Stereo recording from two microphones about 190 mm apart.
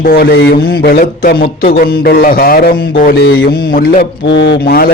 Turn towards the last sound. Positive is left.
turn(degrees=50)  # may be behind; listen again after turning